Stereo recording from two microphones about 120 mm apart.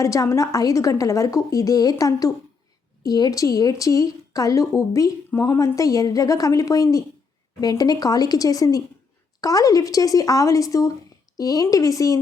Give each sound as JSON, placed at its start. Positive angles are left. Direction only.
{"t": 0.0, "sound": "a woman's voice", "side_deg": 25}